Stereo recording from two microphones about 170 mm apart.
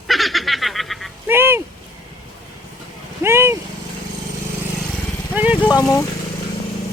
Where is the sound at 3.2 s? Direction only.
15° right (ahead or behind).